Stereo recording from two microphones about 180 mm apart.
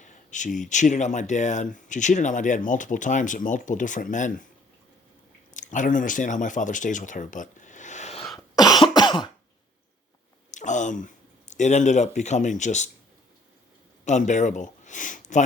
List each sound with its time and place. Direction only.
0.0 s speech: 45° left (ahead or behind)
5.5 s speech: 45° left (ahead or behind)
8.5 s cough: 20° left (ahead or behind)
10.5 s speech: 45° left (ahead or behind)
14.0 s speech: 40° left (ahead or behind)